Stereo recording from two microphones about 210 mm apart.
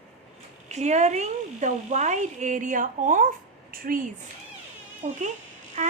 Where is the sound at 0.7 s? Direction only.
35° right (ahead or behind).